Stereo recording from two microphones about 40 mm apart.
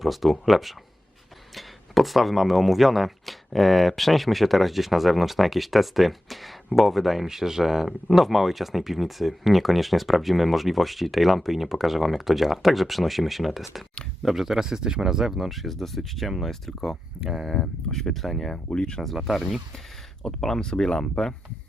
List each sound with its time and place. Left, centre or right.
0.0 s speech: centre
18.5 s speech: left
19.0 s speech: centre
20.4 s speech: centre